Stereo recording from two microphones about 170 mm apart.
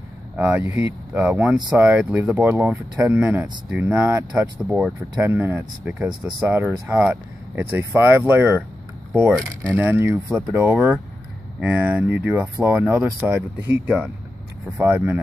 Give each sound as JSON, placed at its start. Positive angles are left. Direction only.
{"t": 0.4, "sound": "speech", "side_deg": -10}
{"t": 9.7, "sound": "speech", "side_deg": -15}